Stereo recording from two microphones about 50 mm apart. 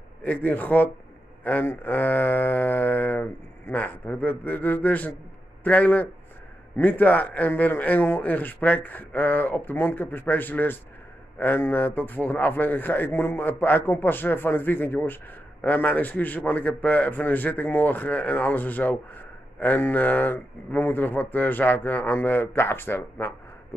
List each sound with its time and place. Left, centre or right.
0.2 s a man's voice: left
1.7 s a man's voice: left
13.1 s a man's voice: left
15.6 s a man's voice: left